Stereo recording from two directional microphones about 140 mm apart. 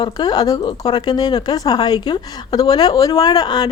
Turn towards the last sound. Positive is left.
turn(degrees=30)  # may be behind; listen again after turning